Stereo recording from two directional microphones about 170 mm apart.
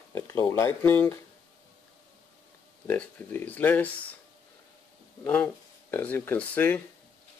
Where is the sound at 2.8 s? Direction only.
10° left (ahead or behind).